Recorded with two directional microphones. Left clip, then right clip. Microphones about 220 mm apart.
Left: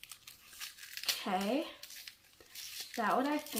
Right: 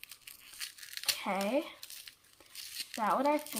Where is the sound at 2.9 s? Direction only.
25° right (ahead or behind).